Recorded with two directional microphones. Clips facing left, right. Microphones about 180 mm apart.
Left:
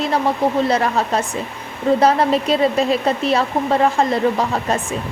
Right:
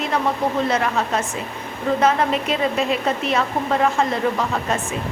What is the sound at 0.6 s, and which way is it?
A woman's voice, 35° left (ahead or behind).